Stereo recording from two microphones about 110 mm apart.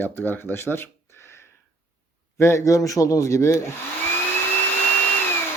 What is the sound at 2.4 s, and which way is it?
A man's voice, 25° left (ahead or behind).